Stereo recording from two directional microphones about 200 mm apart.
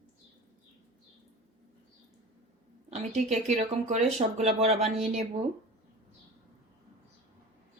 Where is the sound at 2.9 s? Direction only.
35° right (ahead or behind).